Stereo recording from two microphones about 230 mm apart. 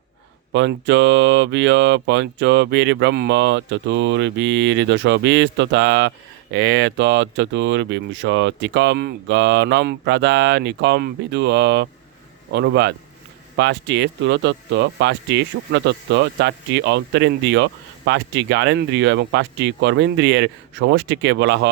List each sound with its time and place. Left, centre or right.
0.5 s speech: right